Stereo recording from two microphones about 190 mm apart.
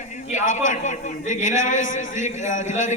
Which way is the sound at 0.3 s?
40° left (ahead or behind).